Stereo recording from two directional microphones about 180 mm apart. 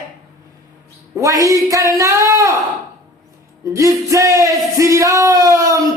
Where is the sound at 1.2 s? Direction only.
20° right (ahead or behind).